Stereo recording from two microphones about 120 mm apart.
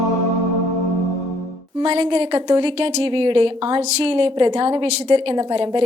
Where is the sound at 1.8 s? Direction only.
45° right (ahead or behind).